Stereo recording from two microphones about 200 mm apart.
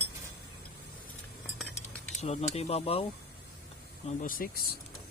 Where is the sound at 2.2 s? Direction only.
30° left (ahead or behind).